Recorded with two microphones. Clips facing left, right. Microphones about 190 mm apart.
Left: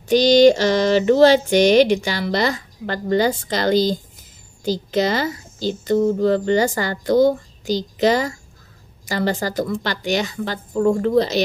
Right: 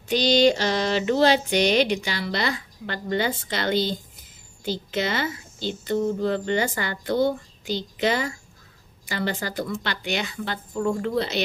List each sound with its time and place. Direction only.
0.0 s a woman's voice: 45° left (ahead or behind)